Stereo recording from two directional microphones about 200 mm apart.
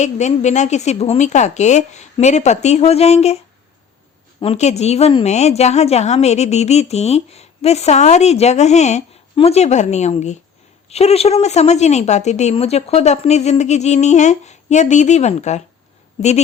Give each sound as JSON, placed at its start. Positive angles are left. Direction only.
{"t": 0.0, "sound": "a woman's voice", "side_deg": 35}